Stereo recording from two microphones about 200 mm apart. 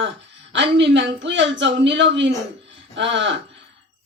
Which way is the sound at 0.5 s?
65° right (ahead or behind).